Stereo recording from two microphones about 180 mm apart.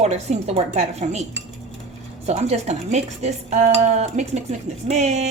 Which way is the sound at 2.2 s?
35° right (ahead or behind).